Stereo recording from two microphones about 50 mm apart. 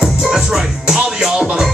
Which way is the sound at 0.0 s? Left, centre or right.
Centre.